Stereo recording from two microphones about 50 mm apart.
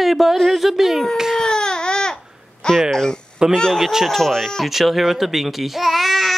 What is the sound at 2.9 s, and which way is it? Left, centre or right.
Speech, centre.